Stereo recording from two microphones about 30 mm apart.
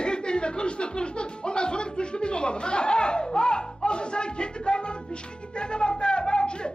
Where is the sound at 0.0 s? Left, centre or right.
Left.